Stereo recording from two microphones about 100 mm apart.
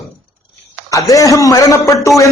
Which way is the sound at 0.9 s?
35° left (ahead or behind).